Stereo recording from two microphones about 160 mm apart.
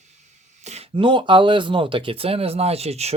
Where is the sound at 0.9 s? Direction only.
30° right (ahead or behind).